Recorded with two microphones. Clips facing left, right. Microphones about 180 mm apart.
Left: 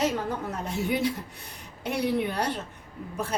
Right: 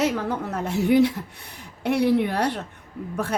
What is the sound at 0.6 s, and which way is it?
A woman's voice, 70° right (ahead or behind).